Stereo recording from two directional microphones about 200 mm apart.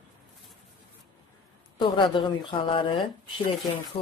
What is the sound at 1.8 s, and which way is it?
Speech, 25° left (ahead or behind).